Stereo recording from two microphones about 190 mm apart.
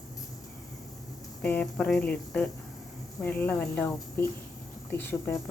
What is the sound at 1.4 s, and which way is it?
A woman's voice, 5° left (ahead or behind).